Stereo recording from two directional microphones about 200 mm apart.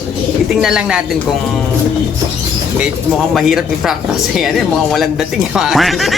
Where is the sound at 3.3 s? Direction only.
Centre (ahead or behind).